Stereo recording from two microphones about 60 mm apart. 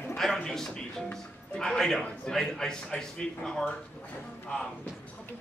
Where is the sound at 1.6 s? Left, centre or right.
Centre.